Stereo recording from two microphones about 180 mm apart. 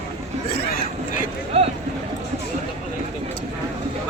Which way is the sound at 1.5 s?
35° right (ahead or behind).